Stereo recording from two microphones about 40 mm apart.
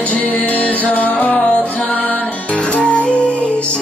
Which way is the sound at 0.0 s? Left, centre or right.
Left.